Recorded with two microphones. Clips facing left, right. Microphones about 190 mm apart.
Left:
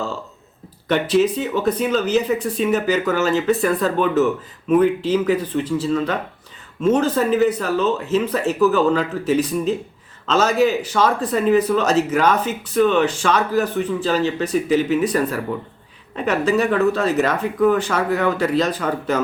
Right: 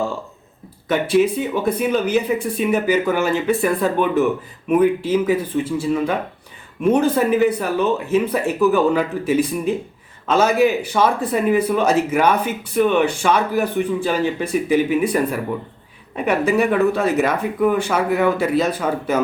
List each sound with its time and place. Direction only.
1.1 s speech: 10° right (ahead or behind)